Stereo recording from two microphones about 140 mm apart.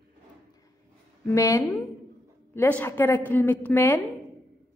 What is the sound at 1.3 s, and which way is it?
A woman's voice, 20° left (ahead or behind).